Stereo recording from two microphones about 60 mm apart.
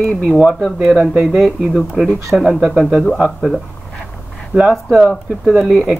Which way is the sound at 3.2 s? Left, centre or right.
Centre.